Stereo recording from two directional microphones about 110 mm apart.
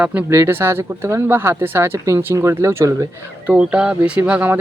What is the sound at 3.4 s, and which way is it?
Speech, 10° right (ahead or behind).